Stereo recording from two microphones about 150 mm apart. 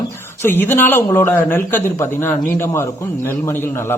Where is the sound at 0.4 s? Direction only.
15° left (ahead or behind).